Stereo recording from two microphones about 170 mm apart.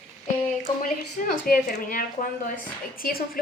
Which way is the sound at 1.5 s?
60° left (ahead or behind).